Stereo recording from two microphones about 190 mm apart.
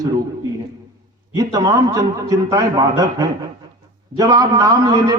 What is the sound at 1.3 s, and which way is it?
A man's voice, 20° right (ahead or behind).